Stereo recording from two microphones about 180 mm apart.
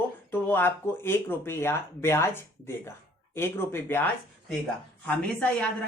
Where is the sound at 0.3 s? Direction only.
10° left (ahead or behind).